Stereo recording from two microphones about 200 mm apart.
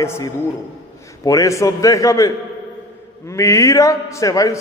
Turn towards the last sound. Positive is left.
turn(degrees=15)  # may be behind; listen again after turning